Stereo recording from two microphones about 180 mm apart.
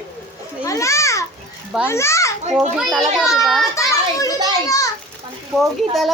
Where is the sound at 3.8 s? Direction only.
20° left (ahead or behind).